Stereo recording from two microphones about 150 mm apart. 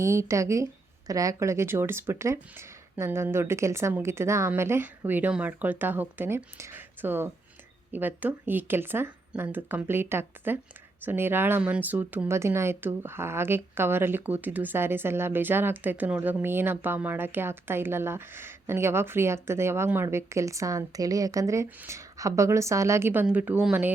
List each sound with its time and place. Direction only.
0.0 s speech: 20° right (ahead or behind)